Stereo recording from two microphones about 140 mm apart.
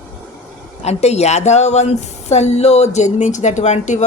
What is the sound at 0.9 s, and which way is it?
A woman's voice, 50° left (ahead or behind).